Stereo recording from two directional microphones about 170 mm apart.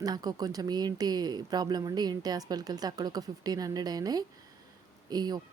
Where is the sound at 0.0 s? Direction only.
25° right (ahead or behind).